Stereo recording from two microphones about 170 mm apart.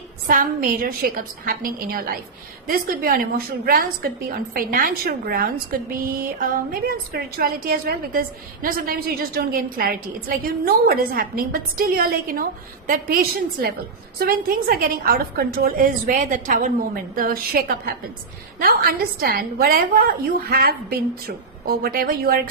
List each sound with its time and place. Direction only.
0.3 s a woman's voice: 55° right (ahead or behind)